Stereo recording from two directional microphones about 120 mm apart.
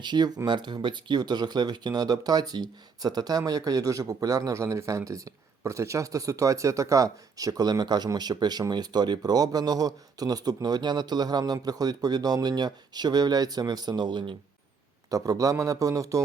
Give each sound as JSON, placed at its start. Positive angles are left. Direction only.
{"t": 0.0, "sound": "a man's voice", "side_deg": -35}